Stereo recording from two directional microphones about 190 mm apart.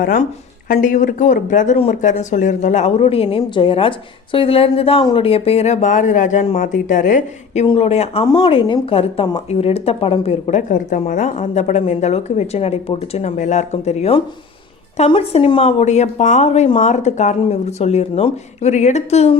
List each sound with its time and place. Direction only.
0.0 s speech: 45° left (ahead or behind)